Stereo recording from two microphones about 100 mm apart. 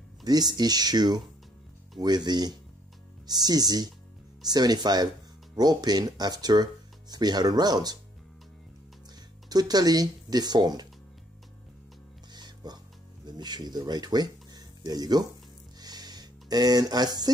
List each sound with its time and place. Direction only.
0.2 s speech: 40° right (ahead or behind)
9.5 s speech: 40° right (ahead or behind)
12.4 s music: 45° right (ahead or behind)
13.2 s speech: 45° right (ahead or behind)
15.8 s a sound: 40° right (ahead or behind)